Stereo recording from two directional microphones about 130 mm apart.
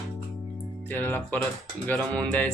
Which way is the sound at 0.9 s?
15° left (ahead or behind).